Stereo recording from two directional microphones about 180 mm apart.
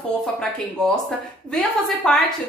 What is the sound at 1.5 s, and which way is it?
Speech, 5° left (ahead or behind).